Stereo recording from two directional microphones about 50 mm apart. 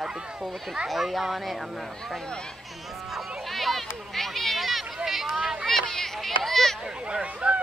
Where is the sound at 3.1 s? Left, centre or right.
Centre.